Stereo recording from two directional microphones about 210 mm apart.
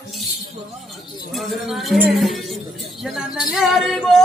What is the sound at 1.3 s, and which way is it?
Speech, centre (ahead or behind).